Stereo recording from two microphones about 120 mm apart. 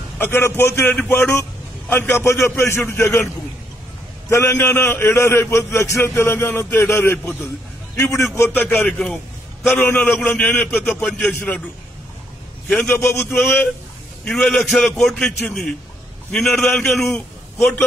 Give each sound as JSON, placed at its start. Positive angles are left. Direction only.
{"t": 0.2, "sound": "a man's voice", "side_deg": 20}
{"t": 4.3, "sound": "a man's voice", "side_deg": 20}
{"t": 12.7, "sound": "a man's voice", "side_deg": 20}
{"t": 14.2, "sound": "a man's voice", "side_deg": 5}